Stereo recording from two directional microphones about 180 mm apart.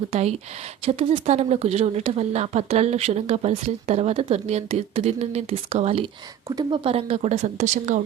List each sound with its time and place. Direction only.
0.1 s speech: 35° right (ahead or behind)